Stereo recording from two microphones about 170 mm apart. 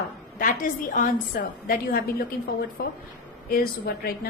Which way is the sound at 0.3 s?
55° left (ahead or behind).